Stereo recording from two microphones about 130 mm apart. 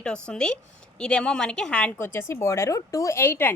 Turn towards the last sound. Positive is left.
turn(degrees=15)  # may be behind; listen again after turning